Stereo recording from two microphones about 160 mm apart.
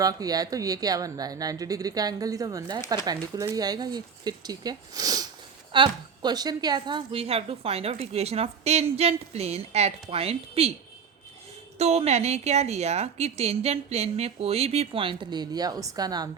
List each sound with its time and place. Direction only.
0.0 s a woman's voice: 25° right (ahead or behind); by 10.7 s 40° right (ahead or behind)
11.8 s a woman's voice: 40° right (ahead or behind); by 16.3 s 25° right (ahead or behind)